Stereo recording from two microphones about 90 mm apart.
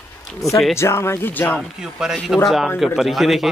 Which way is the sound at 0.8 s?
30° left (ahead or behind).